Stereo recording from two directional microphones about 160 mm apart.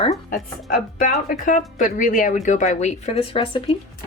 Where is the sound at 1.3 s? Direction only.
60° left (ahead or behind).